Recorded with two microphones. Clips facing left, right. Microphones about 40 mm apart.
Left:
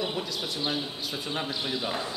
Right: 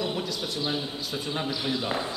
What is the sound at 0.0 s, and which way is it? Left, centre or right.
A man's voice, centre.